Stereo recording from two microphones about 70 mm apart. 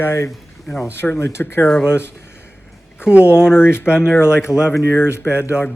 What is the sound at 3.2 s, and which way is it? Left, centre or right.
Speech, left.